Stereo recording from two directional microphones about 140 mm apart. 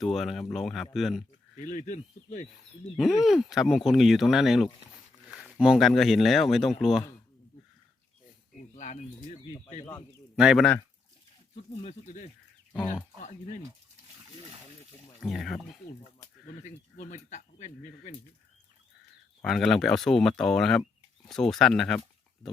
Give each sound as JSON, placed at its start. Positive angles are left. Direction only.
{"t": 0.0, "sound": "speech", "side_deg": 0}
{"t": 1.7, "sound": "speech", "side_deg": 65}
{"t": 3.0, "sound": "speech", "side_deg": 0}
{"t": 8.7, "sound": "speech", "side_deg": 60}
{"t": 10.3, "sound": "speech", "side_deg": -5}
{"t": 11.5, "sound": "speech", "side_deg": 50}
{"t": 15.2, "sound": "speech", "side_deg": 0}
{"t": 16.6, "sound": "speech", "side_deg": 60}
{"t": 19.4, "sound": "speech", "side_deg": 0}